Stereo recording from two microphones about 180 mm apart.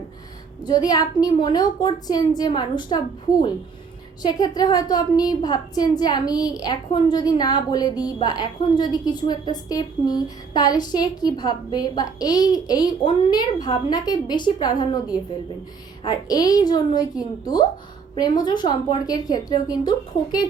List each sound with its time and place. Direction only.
0.6 s a woman's voice: 25° left (ahead or behind)
4.2 s a woman's voice: 20° left (ahead or behind)